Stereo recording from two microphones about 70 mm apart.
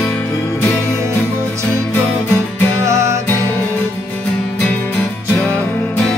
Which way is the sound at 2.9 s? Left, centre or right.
Right.